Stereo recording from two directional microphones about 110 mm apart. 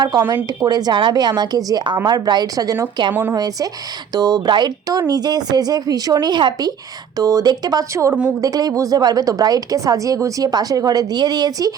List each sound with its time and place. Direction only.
0.0 s a woman's voice: 40° right (ahead or behind)
3.1 s a woman's voice: 20° right (ahead or behind)
3.3 s a woman's voice: 35° right (ahead or behind)